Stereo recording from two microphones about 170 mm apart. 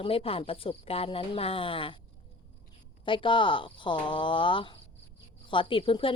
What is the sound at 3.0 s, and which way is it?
A woman's voice, 30° left (ahead or behind).